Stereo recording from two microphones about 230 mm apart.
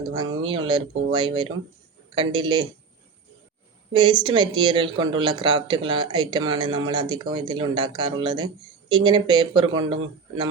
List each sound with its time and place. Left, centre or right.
0.1 s speech: centre
3.9 s speech: centre